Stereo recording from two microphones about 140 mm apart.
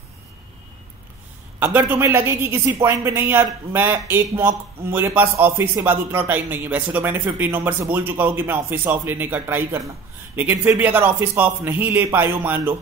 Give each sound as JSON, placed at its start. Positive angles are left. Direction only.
{"t": 1.6, "sound": "speech", "side_deg": -15}